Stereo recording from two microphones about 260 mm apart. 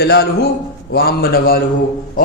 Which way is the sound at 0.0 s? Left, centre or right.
Left.